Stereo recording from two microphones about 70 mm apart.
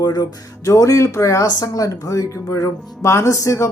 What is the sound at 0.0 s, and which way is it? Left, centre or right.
Speech, left.